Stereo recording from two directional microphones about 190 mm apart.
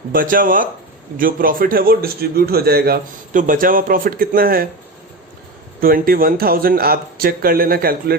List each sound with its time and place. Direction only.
0.1 s a man's voice: 45° right (ahead or behind)
5.8 s a man's voice: 50° right (ahead or behind)